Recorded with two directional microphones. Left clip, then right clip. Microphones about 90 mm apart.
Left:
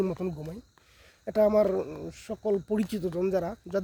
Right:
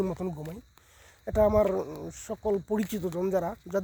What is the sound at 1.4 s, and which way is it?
Speech, 30° left (ahead or behind).